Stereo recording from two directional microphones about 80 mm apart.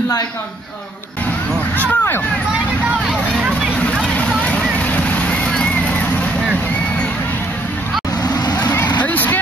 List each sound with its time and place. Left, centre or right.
1.8 s a sound: left
4.0 s vehicle: centre
8.2 s vehicle: left
9.0 s vehicle: left